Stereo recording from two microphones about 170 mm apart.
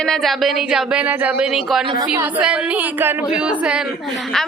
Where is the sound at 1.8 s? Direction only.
30° right (ahead or behind).